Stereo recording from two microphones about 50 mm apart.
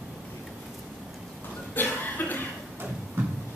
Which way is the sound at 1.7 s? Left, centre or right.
Left.